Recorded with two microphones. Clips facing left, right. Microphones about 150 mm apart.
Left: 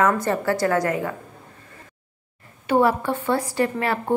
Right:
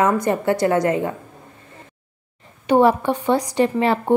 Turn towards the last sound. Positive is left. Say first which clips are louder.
# right 5 dB
turn(degrees=-20)  # may be behind; listen again after turning